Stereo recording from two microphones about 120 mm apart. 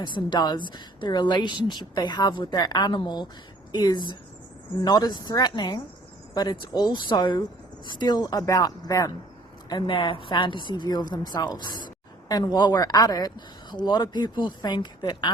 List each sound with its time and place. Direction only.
0.0 s a woman's voice: 40° left (ahead or behind)